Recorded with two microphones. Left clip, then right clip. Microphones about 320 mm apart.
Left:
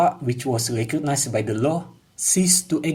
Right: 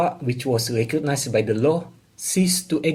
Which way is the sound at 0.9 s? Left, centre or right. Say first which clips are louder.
Left 1 dB; left.